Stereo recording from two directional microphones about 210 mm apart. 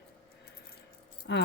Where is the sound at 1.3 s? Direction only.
55° left (ahead or behind).